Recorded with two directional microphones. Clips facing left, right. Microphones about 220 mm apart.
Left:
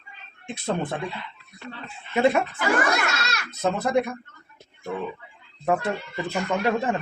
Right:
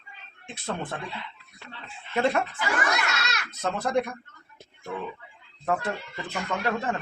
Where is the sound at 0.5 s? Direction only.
15° left (ahead or behind).